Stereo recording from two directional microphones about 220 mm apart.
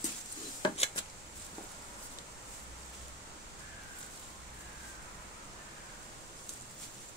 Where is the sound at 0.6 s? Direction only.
20° left (ahead or behind).